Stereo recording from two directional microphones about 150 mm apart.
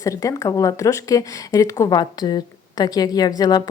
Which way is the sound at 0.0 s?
20° left (ahead or behind).